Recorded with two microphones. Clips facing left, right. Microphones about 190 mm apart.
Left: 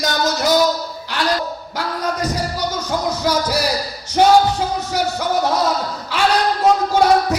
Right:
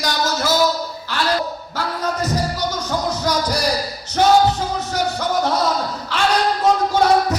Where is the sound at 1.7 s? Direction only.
10° left (ahead or behind).